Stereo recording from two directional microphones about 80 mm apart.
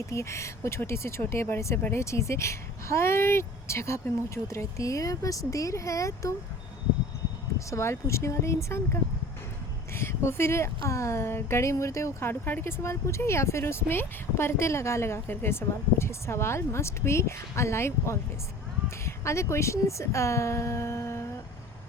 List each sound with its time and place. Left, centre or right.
0.1 s speech: left
7.7 s speech: left
12.3 s speech: left